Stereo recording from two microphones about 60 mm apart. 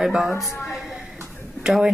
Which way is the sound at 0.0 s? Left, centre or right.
Centre.